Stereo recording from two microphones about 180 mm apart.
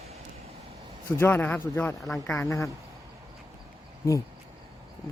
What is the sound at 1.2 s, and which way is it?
Speech, 10° left (ahead or behind).